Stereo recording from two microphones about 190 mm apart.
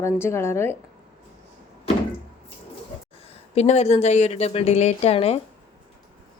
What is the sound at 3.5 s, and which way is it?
A woman's voice, 35° left (ahead or behind).